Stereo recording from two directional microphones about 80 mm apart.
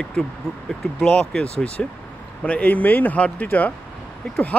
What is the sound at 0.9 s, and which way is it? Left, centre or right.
Speech, centre.